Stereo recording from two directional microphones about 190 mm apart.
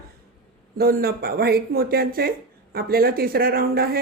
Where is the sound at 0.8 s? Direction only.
55° right (ahead or behind).